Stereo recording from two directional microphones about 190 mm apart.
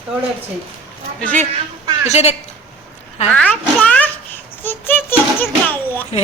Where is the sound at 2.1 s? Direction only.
35° left (ahead or behind).